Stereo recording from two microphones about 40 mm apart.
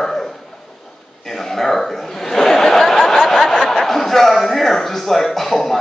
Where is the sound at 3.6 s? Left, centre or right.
Centre.